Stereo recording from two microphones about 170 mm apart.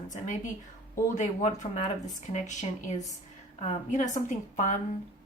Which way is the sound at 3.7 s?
45° left (ahead or behind).